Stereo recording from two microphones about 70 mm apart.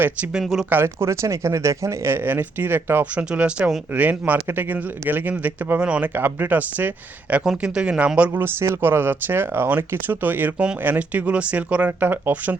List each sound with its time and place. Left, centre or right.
0.7 s speech: right
5.8 s speech: centre
6.1 s speech: right
7.4 s speech: centre
8.4 s speech: right